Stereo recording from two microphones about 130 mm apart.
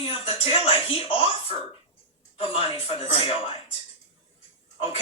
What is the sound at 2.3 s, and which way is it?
Speech, 45° left (ahead or behind).